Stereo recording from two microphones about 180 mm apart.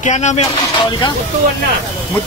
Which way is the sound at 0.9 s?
25° left (ahead or behind).